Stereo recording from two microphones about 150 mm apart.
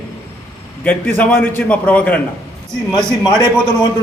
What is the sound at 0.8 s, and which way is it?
A man's voice, 10° left (ahead or behind).